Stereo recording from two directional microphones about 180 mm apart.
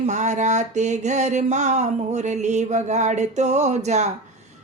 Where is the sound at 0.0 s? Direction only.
40° right (ahead or behind).